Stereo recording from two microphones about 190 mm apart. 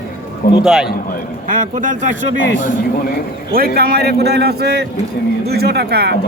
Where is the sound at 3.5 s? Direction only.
55° right (ahead or behind).